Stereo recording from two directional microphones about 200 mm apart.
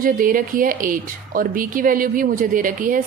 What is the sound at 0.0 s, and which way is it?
A woman's voice, 45° right (ahead or behind).